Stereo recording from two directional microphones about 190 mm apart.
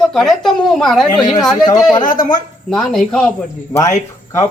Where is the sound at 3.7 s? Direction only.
15° left (ahead or behind).